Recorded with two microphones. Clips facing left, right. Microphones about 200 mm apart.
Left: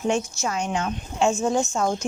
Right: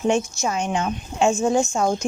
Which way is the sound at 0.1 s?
15° right (ahead or behind).